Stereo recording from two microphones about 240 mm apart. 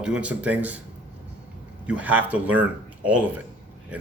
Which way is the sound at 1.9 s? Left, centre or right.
Centre.